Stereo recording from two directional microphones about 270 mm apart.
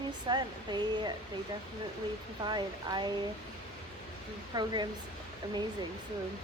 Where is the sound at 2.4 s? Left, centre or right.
Centre.